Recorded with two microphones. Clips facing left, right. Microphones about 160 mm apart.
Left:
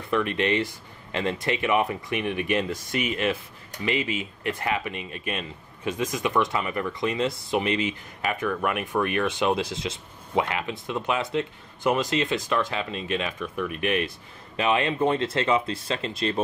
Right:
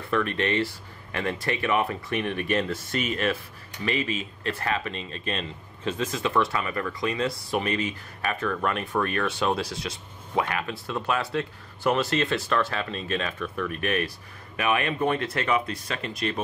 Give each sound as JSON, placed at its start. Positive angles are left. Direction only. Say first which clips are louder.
{"t": 0.1, "sound": "speech", "louder": "left 1 dB", "side_deg": 20}